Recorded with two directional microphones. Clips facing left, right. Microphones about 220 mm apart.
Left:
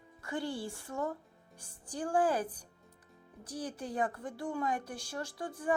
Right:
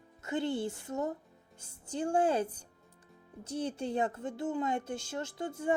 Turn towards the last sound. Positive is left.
turn(degrees=-25)  # may be behind; listen again after turning